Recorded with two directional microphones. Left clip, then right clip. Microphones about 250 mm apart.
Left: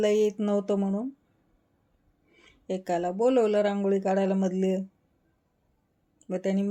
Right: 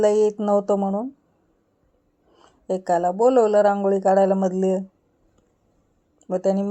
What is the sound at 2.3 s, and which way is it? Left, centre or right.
Speech, centre.